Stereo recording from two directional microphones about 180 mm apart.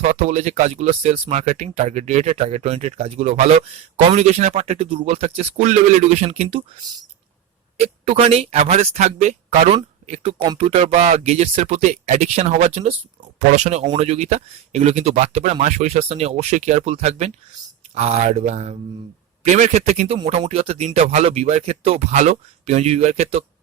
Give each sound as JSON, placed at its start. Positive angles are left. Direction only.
{"t": 0.0, "sound": "speech", "side_deg": -40}
{"t": 7.8, "sound": "speech", "side_deg": -35}